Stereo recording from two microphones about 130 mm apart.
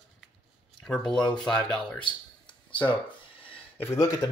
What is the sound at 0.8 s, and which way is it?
Speech, 5° left (ahead or behind).